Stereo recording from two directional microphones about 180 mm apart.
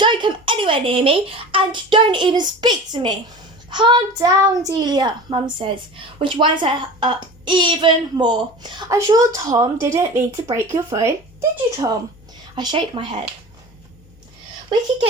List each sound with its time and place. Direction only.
0.0 s a child's voice: 25° right (ahead or behind)
12.5 s a child's voice: 25° right (ahead or behind)